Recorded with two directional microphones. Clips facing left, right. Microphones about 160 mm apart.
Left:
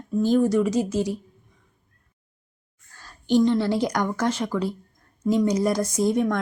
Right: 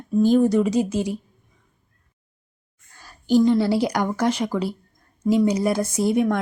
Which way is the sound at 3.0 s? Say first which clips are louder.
Right 2 dB; 5° right (ahead or behind).